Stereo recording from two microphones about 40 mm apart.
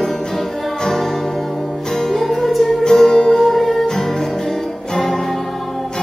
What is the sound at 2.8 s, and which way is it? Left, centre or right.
Music, centre.